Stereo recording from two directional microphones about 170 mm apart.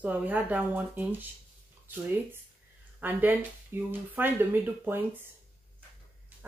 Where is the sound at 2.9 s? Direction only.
10° right (ahead or behind).